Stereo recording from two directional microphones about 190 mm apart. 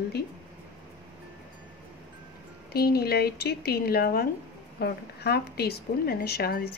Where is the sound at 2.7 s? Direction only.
55° left (ahead or behind).